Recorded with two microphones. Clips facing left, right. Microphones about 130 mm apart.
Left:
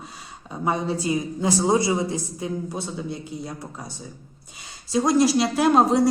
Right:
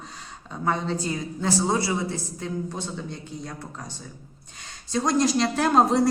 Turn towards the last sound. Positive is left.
turn(degrees=0)  # may be behind; listen again after turning